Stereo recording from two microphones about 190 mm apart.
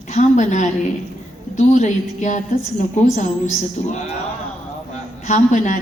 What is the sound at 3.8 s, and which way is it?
Speech, 40° left (ahead or behind).